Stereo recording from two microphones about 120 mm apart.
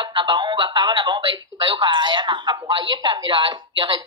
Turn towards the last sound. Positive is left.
turn(degrees=-40)  # may be behind; listen again after turning